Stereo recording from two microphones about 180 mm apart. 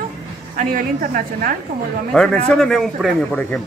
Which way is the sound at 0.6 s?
50° right (ahead or behind).